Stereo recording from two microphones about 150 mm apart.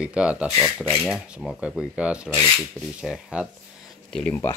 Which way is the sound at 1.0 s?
Centre (ahead or behind).